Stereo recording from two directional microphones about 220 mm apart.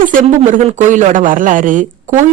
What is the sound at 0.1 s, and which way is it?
Speech, 35° right (ahead or behind).